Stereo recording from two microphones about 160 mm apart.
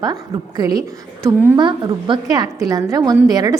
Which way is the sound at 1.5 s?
25° right (ahead or behind).